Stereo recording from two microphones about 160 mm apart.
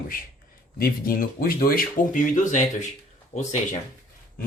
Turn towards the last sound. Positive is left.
turn(degrees=45)  # may be behind; listen again after turning